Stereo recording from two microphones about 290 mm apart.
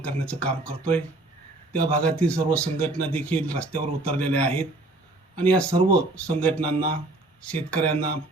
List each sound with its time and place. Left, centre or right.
0.0 s speech: centre